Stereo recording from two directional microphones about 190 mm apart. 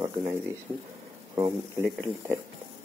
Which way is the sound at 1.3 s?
15° right (ahead or behind).